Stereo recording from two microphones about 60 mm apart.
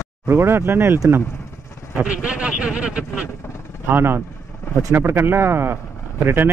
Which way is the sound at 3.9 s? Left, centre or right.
Right.